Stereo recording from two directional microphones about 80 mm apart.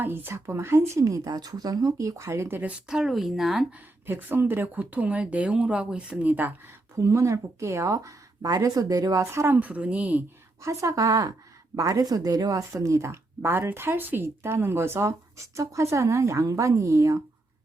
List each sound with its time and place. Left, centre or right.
0.0 s speech: right
2.7 s speech: centre
4.0 s speech: right
7.0 s speech: right
9.6 s speech: centre
10.6 s speech: right